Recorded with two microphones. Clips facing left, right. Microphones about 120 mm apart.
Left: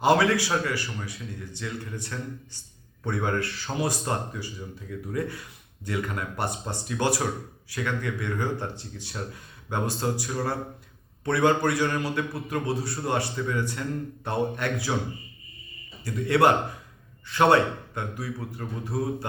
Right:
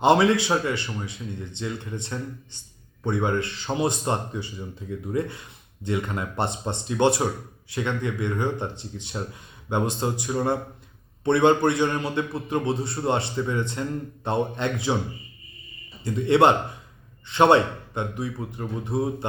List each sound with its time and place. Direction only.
0.0 s a man's voice: 25° right (ahead or behind)
16.0 s a man's voice: 25° right (ahead or behind)